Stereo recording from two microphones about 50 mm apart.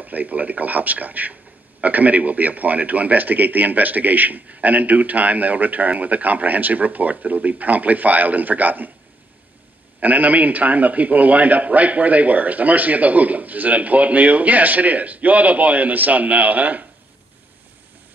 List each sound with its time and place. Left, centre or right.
0.0 s a man's voice: right
9.9 s a man's voice: right